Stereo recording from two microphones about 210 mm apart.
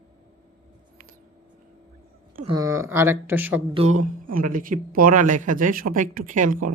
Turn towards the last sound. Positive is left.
turn(degrees=-40)  # may be behind; listen again after turning